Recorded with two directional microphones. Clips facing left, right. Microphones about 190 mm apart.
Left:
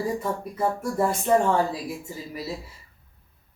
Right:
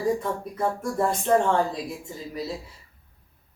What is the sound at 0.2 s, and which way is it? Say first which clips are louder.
Speech: left 1 dB; 5° left (ahead or behind).